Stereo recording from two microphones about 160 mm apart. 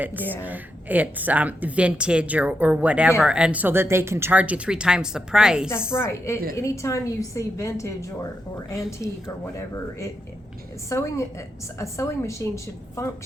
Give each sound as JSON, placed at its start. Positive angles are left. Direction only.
{"t": 0.0, "sound": "speech", "side_deg": -10}
{"t": 5.9, "sound": "a woman's voice", "side_deg": 15}